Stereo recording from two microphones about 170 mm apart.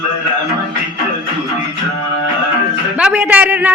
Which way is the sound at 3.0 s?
10° right (ahead or behind).